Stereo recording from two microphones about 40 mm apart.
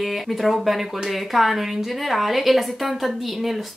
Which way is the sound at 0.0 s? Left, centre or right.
Centre.